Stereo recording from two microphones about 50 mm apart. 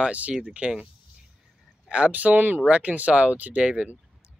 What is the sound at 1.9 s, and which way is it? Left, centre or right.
Speech, right.